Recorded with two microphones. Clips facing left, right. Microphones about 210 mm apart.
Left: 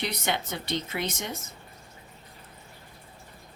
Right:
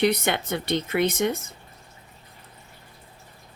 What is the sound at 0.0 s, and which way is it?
Speech, 60° right (ahead or behind).